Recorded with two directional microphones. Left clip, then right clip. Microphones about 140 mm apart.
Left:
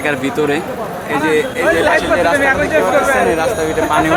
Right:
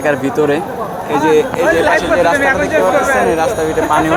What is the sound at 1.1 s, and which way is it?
Speech, 15° right (ahead or behind).